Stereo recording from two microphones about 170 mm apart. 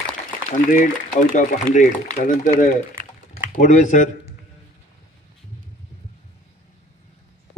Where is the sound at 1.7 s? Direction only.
50° left (ahead or behind).